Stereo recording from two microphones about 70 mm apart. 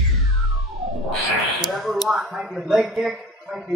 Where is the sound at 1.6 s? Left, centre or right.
Centre.